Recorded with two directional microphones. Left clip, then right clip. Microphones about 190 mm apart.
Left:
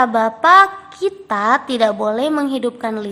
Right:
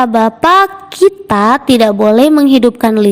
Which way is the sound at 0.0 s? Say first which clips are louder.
Right 4 dB; 40° right (ahead or behind).